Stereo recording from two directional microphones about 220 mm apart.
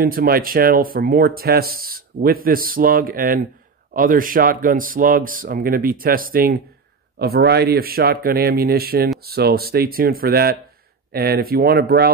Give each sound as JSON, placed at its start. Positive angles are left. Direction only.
{"t": 0.0, "sound": "speech", "side_deg": -40}